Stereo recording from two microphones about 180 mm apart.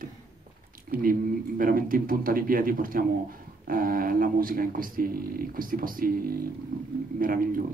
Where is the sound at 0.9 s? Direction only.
50° right (ahead or behind).